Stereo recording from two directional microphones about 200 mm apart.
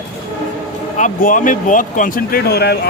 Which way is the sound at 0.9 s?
40° left (ahead or behind).